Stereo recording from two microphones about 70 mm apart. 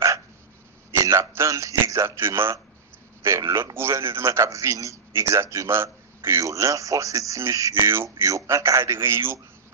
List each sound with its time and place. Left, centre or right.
0.9 s a man's voice: right
6.4 s a man's voice: right
8.3 s a man's voice: right
8.9 s a man's voice: right